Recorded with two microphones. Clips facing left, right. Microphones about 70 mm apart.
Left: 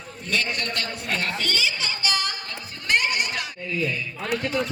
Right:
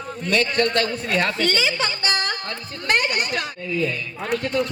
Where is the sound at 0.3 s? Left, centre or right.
Right.